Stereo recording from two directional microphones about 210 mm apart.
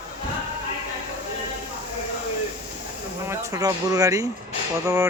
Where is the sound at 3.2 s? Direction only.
15° right (ahead or behind).